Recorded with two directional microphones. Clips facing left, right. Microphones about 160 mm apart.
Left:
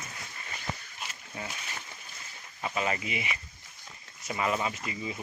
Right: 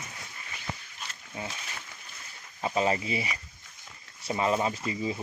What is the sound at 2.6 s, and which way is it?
Speech, 30° right (ahead or behind).